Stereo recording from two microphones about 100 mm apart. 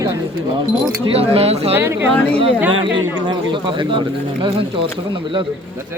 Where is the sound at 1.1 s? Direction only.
80° right.